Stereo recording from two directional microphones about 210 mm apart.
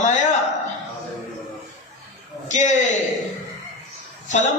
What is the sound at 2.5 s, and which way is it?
Speech, 35° left (ahead or behind).